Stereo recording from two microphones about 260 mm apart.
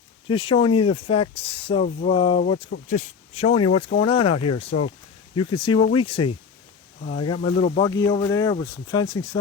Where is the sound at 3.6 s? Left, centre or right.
Left.